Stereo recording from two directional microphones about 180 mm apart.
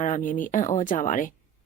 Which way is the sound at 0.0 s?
45° left (ahead or behind).